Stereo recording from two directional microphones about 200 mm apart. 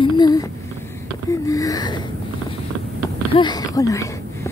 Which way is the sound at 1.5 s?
15° left (ahead or behind).